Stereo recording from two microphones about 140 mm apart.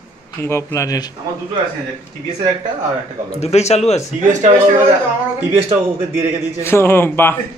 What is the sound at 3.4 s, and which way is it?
Speech, 50° left (ahead or behind).